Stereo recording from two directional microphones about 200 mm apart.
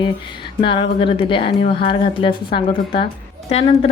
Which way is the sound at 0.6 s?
25° left (ahead or behind).